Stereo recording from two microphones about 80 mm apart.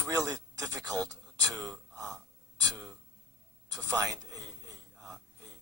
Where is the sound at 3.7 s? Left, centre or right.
Right.